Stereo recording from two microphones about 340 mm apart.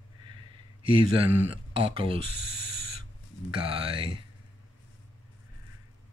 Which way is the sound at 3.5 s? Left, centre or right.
Centre.